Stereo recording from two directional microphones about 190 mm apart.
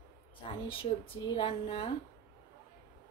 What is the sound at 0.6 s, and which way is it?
Speech, 30° left (ahead or behind).